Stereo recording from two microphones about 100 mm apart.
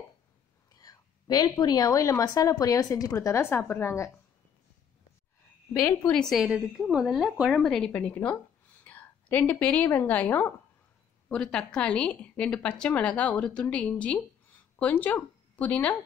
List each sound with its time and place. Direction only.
0.7 s whispering: 40° left (ahead or behind)
1.6 s speech: 40° left (ahead or behind)
6.3 s a woman's voice: 5° right (ahead or behind); by 16.0 s 15° left (ahead or behind)